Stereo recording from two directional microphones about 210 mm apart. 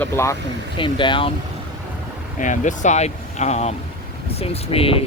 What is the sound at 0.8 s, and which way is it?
Speech, 25° left (ahead or behind).